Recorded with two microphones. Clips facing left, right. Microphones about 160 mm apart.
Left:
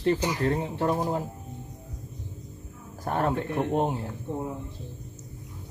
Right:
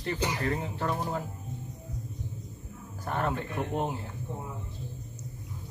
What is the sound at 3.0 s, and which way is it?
Speech, 40° left (ahead or behind).